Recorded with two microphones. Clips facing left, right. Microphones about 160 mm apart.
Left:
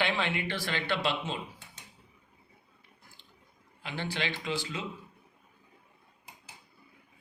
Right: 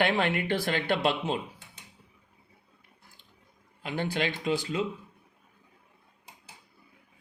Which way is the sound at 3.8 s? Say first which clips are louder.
Right 5 dB; 45° right (ahead or behind).